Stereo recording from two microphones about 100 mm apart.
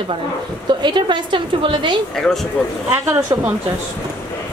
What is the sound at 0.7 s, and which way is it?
A woman's voice, 50° right (ahead or behind).